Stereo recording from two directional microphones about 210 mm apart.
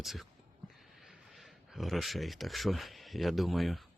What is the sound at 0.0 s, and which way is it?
Speech, centre (ahead or behind).